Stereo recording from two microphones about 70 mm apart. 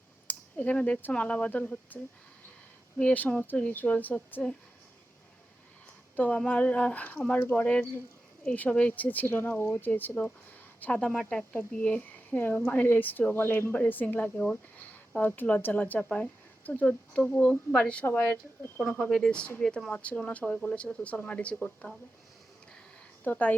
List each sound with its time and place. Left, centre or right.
0.3 s speech: left
3.0 s speech: left
6.1 s a woman's voice: left
18.0 s a woman's voice: left
18.8 s speech: centre
19.6 s speech: centre
19.9 s speech: centre
23.2 s speech: left